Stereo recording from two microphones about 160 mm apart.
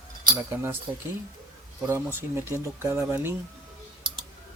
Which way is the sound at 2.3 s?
15° right (ahead or behind).